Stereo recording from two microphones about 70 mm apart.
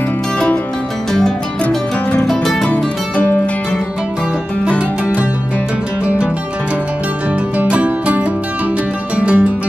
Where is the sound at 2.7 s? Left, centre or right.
Left.